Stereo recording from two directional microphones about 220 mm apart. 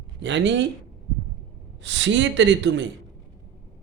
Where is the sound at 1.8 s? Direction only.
55° right (ahead or behind).